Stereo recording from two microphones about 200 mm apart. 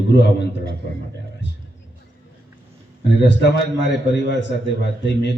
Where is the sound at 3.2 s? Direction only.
60° left (ahead or behind).